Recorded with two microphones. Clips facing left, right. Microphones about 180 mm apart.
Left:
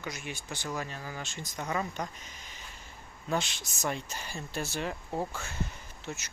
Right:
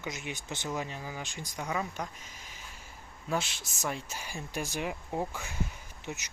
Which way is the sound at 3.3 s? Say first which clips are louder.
Left 1 dB; 5° right (ahead or behind).